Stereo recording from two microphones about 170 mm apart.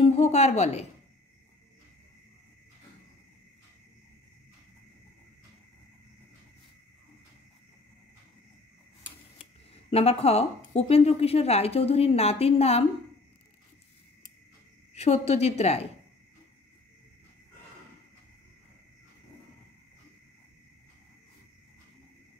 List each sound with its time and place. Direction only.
0.0 s a woman's voice: 40° left (ahead or behind)
9.8 s a woman's voice: 35° left (ahead or behind)
15.0 s a woman's voice: 40° left (ahead or behind)